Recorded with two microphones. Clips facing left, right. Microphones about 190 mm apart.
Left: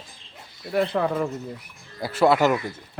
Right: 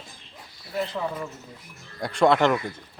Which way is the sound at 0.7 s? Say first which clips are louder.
Left 6 dB; 65° left (ahead or behind).